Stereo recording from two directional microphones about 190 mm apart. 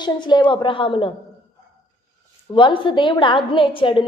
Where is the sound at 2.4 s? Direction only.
25° left (ahead or behind).